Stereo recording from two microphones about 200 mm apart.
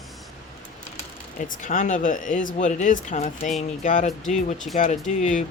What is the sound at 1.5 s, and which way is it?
Speech, 40° left (ahead or behind).